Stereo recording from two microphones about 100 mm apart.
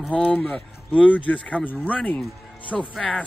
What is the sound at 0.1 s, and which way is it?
Speech, 10° left (ahead or behind).